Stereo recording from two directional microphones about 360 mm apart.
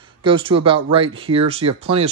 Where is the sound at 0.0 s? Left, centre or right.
Centre.